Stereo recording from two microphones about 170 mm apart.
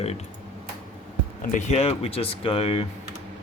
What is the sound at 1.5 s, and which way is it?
Speech, 40° left (ahead or behind).